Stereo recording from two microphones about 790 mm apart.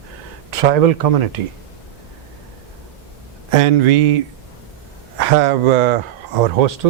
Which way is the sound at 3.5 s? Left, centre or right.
Right.